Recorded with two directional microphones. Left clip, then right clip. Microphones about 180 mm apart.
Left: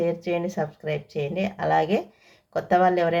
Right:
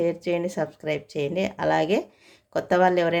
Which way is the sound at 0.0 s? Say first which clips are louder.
Even; 25° right (ahead or behind).